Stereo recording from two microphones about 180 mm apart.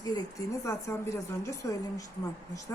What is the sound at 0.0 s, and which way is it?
Speech, 20° left (ahead or behind).